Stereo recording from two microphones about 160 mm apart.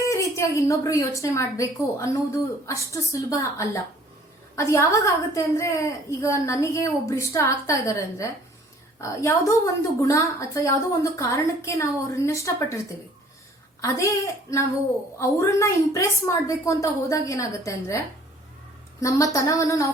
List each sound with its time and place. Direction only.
0.0 s a woman's voice: 20° left (ahead or behind)
13.8 s a woman's voice: 20° left (ahead or behind)